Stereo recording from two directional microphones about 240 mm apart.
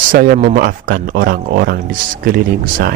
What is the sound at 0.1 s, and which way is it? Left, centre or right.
Speech, right.